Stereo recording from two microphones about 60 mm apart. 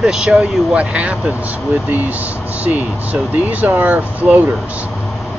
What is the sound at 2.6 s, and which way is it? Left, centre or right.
Speech, right.